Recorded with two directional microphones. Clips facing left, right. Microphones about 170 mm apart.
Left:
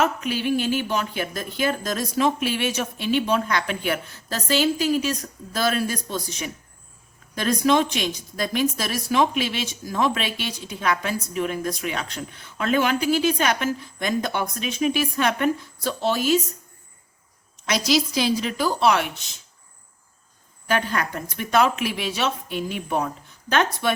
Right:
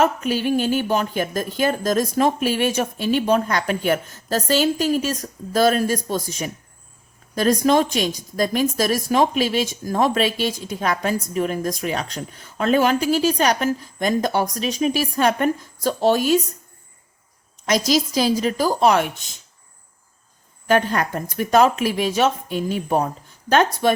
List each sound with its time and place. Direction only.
0.0 s a woman's voice: 45° right (ahead or behind)
17.7 s a woman's voice: 45° right (ahead or behind)
20.7 s speech: 40° right (ahead or behind)